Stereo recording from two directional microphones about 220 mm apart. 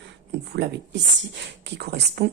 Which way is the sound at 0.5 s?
45° right (ahead or behind).